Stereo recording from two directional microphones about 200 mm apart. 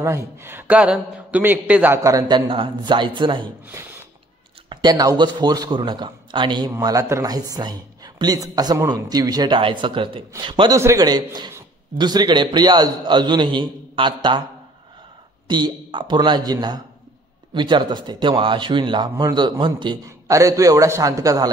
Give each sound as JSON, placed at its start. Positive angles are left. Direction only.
{"t": 0.0, "sound": "a man's voice", "side_deg": -15}
{"t": 4.6, "sound": "a man's voice", "side_deg": -20}
{"t": 15.4, "sound": "a man's voice", "side_deg": -20}